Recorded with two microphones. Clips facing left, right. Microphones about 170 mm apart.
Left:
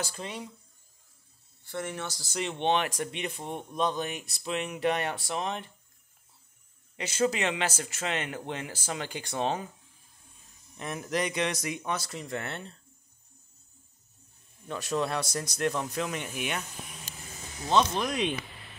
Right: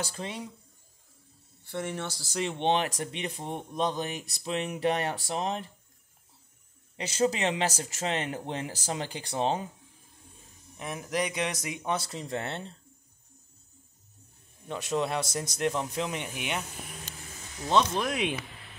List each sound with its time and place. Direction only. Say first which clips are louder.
1.7 s speech: right 1 dB; 30° right (ahead or behind)
7.0 s speech: right 1 dB; 35° right (ahead or behind)
10.8 s speech: even; 10° right (ahead or behind); by 12.7 s 25° right (ahead or behind)
14.7 s speech: right 1 dB; 20° right (ahead or behind)
17.9 s speech: even; 5° right (ahead or behind)